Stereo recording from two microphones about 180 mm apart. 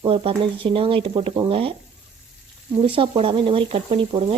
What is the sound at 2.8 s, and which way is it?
Speech, 30° right (ahead or behind).